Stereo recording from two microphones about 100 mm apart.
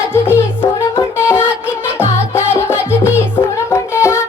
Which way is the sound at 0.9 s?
30° left (ahead or behind).